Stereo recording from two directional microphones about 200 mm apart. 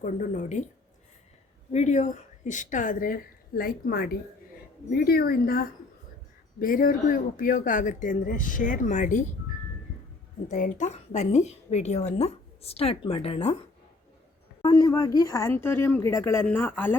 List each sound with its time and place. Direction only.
0.0 s a woman's voice: 40° left (ahead or behind)
1.7 s a woman's voice: 35° left (ahead or behind)
10.5 s a woman's voice: 40° left (ahead or behind)
14.6 s speech: 20° left (ahead or behind)